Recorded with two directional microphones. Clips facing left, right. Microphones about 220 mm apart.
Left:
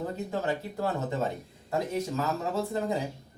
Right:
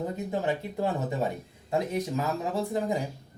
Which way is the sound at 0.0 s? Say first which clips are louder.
Right 2 dB; 15° right (ahead or behind).